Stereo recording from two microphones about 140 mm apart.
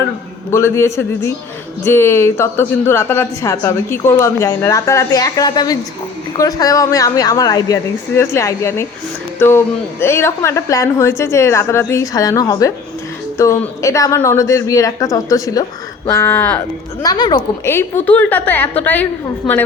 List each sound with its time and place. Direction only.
0.5 s a woman's voice: 20° left (ahead or behind)
17.0 s a woman's voice: 30° left (ahead or behind)
17.7 s a woman's voice: 15° left (ahead or behind)
19.4 s a woman's voice: centre (ahead or behind)